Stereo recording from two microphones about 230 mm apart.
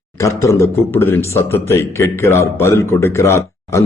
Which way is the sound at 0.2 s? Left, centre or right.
Centre.